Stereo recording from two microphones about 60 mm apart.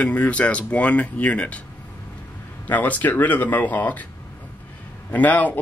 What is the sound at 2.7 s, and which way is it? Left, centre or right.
Speech, left.